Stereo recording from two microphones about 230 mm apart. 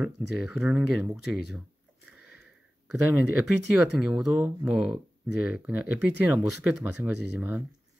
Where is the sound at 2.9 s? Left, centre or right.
Centre.